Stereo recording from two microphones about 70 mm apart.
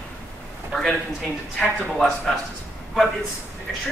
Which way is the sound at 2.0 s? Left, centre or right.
Centre.